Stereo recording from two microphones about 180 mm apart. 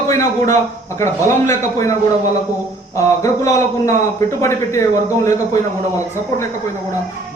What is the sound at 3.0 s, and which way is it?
Speech, 15° left (ahead or behind).